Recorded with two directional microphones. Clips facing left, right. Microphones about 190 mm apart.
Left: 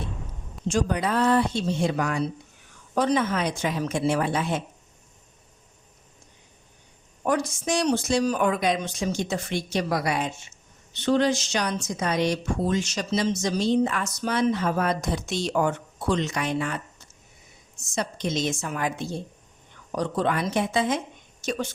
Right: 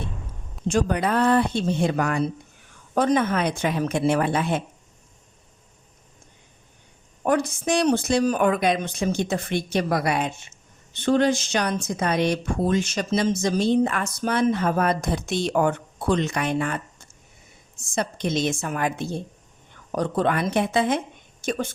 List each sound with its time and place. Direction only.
0.7 s speech: 55° right (ahead or behind)
7.3 s speech: 60° right (ahead or behind)